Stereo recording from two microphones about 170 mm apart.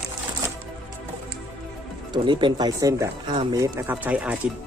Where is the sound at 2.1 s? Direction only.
30° right (ahead or behind).